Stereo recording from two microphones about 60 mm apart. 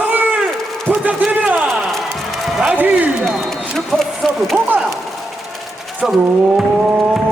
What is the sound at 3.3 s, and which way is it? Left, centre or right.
Run, centre.